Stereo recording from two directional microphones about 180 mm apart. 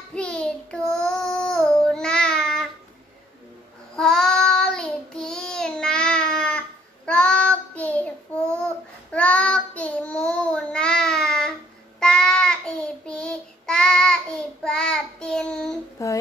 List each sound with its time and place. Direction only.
0.1 s child singing: 5° left (ahead or behind)
3.9 s child singing: centre (ahead or behind)
16.0 s a sound: 20° left (ahead or behind)